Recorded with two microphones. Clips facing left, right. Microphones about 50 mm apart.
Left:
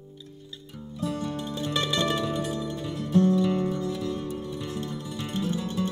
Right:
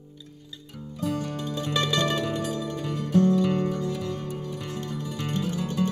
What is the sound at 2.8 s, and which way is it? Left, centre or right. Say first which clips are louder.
Music: right 1 dB; right.